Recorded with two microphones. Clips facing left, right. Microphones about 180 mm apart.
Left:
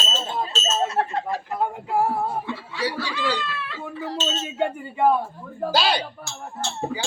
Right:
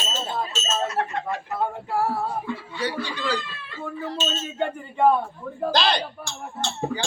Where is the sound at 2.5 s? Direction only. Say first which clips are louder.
Left 1 dB; 80° left.